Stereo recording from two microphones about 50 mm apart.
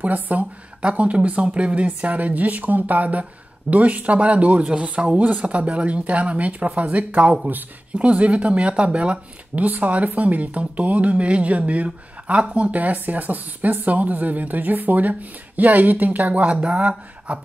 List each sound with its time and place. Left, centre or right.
0.0 s speech: right
12.7 s speech: right